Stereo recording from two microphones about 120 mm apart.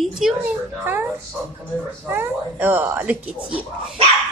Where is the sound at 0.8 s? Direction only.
15° right (ahead or behind).